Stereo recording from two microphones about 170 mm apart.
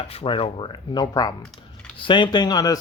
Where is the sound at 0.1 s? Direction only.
35° left (ahead or behind).